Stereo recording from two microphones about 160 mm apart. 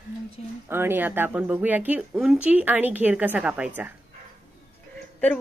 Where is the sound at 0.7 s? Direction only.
15° right (ahead or behind).